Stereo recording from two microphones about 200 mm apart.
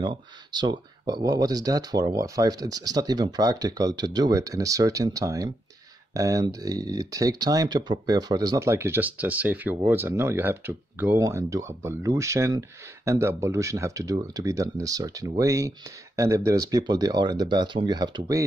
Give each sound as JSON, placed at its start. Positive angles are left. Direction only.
{"t": 0.0, "sound": "speech", "side_deg": -20}